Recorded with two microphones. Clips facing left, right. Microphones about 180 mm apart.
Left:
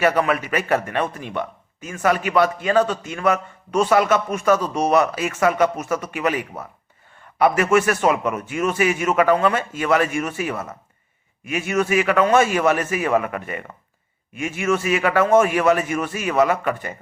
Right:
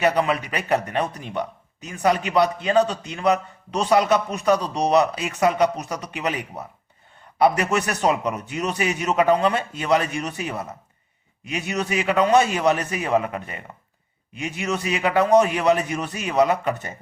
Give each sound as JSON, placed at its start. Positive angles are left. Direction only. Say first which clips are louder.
{"t": 0.0, "sound": "a man's voice", "louder": "left 2 dB", "side_deg": -20}
{"t": 4.4, "sound": "a man's voice", "louder": "left 2 dB", "side_deg": -15}
{"t": 7.4, "sound": "a man's voice", "louder": "left 3 dB", "side_deg": -20}